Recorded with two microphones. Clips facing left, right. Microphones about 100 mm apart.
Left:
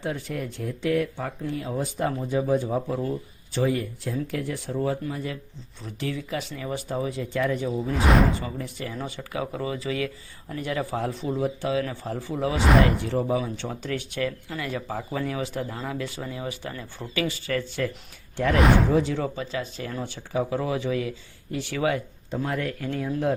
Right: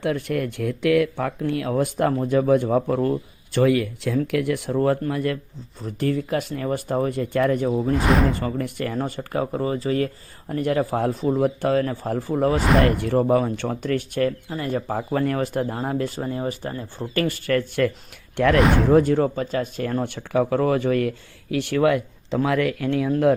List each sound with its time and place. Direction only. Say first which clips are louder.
0.0 s speech: right 7 dB; 65° right (ahead or behind); by 4.2 s 85° right
4.3 s speech: right 7 dB; 70° right (ahead or behind)
5.8 s speech: right 7 dB; 50° right (ahead or behind)
7.9 s speech: left 1 dB; centre (ahead or behind)
8.3 s speech: right 5 dB; 55° right (ahead or behind); by 17.1 s 35° right (ahead or behind)
17.2 s speech: right 5 dB; 55° right (ahead or behind)
18.5 s speech: even; centre (ahead or behind)
18.9 s speech: right 7 dB; 50° right (ahead or behind)